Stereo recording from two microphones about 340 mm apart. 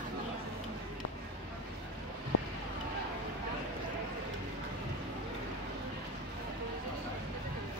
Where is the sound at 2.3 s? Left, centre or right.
Left.